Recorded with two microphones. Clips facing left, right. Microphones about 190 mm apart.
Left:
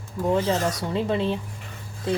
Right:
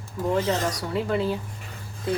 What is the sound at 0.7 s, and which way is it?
Speech, 25° left (ahead or behind).